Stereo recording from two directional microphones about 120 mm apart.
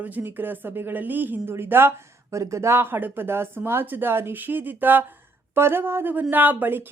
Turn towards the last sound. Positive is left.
turn(degrees=-15)  # may be behind; listen again after turning